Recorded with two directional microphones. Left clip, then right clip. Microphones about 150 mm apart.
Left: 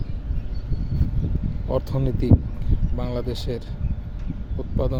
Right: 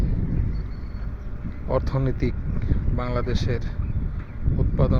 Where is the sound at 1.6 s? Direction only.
25° left (ahead or behind).